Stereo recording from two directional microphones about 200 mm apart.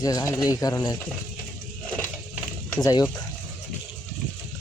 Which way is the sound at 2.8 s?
20° left (ahead or behind).